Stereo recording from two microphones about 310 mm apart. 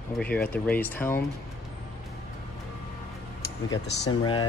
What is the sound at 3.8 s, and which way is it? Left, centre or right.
Speech, left.